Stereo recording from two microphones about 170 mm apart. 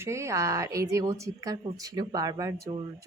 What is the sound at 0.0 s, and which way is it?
A woman's voice, 15° right (ahead or behind).